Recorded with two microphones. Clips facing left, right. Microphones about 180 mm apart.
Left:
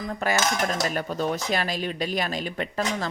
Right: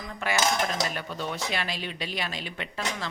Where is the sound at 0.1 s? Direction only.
40° left (ahead or behind).